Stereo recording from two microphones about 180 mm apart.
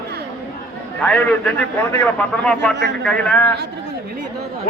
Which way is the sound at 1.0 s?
5° left (ahead or behind).